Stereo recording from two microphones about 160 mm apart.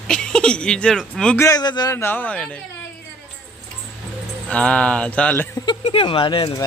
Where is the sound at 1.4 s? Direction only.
25° left (ahead or behind).